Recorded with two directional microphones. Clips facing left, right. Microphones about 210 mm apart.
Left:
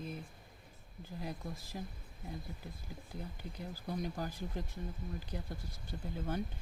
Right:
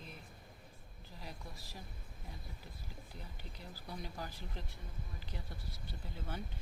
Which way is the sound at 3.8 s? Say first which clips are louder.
Left 7 dB; 45° left (ahead or behind).